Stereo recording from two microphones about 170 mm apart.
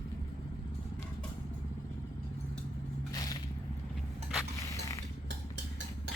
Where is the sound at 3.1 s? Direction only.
20° left (ahead or behind).